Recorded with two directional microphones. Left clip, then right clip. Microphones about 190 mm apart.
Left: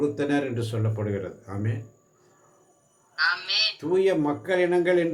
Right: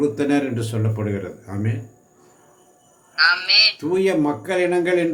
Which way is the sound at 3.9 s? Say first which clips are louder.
Right 3 dB; 5° right (ahead or behind).